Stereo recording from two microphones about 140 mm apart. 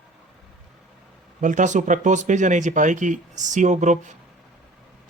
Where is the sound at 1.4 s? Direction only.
65° right (ahead or behind).